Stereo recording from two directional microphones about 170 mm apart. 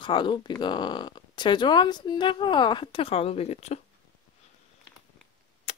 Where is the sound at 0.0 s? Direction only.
30° left (ahead or behind).